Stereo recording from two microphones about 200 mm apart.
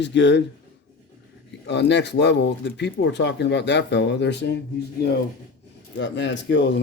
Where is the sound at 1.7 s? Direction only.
60° left (ahead or behind).